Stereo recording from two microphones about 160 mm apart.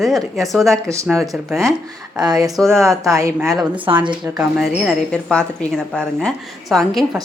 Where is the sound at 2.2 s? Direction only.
25° right (ahead or behind).